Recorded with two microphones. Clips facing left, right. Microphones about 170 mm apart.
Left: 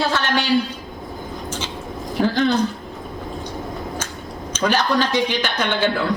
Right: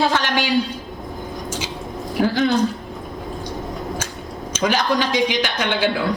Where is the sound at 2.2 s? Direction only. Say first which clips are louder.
Even; 5° right (ahead or behind).